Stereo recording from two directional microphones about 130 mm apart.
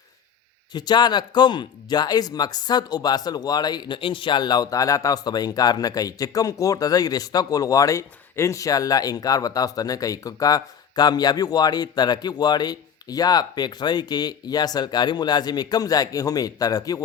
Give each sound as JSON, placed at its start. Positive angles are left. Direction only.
{"t": 0.7, "sound": "speech", "side_deg": 35}